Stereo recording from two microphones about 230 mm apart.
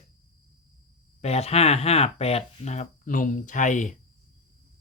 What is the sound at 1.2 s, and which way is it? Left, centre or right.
Speech, left.